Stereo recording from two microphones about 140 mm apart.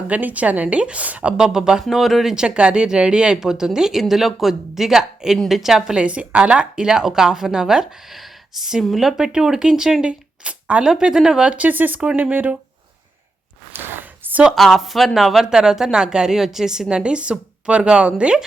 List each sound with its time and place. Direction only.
0.1 s a woman's voice: 10° right (ahead or behind)
13.7 s a sound: 15° right (ahead or behind)
14.5 s a woman's voice: centre (ahead or behind)